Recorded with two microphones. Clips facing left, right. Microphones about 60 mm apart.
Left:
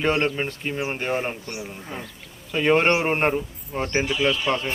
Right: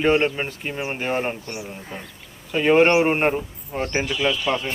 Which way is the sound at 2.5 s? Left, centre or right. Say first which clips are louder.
Right 3 dB; centre.